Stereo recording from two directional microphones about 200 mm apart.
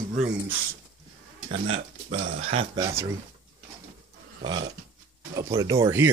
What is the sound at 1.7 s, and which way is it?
Speech, 30° right (ahead or behind).